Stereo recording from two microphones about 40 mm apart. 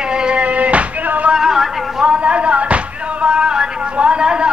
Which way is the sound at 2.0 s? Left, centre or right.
Right.